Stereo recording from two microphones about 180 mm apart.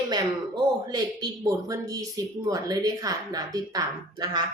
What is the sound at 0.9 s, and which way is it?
Speech, 20° right (ahead or behind).